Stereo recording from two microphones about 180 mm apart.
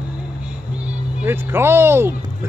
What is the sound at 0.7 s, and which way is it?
Music, 10° right (ahead or behind).